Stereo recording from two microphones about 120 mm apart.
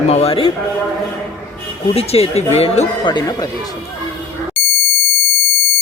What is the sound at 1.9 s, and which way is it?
Speech, 55° left (ahead or behind).